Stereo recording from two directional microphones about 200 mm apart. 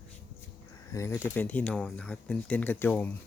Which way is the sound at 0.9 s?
15° left (ahead or behind).